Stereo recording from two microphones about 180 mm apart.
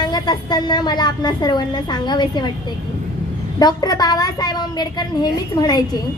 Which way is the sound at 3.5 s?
20° left (ahead or behind).